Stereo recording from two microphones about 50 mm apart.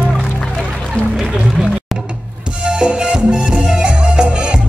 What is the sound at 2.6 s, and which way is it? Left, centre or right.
Music, centre.